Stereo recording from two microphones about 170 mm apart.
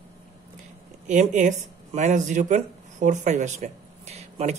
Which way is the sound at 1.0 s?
45° right (ahead or behind).